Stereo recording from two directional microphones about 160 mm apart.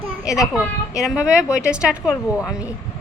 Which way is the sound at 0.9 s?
5° right (ahead or behind).